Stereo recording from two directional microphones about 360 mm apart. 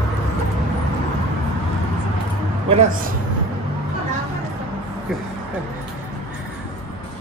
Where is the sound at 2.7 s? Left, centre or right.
Centre.